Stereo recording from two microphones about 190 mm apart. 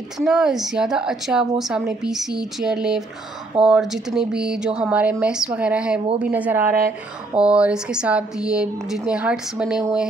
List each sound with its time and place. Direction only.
0.2 s a woman's voice: 5° right (ahead or behind)